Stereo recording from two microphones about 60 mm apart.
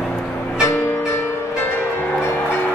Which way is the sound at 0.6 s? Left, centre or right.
Left.